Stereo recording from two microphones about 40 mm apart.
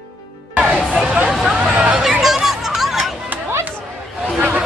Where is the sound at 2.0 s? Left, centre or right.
Centre.